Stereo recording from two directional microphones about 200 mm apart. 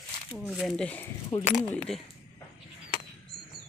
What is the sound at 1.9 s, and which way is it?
Speech, centre (ahead or behind).